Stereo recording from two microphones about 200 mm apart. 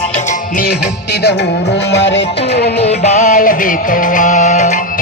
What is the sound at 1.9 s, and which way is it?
Music, 65° left (ahead or behind).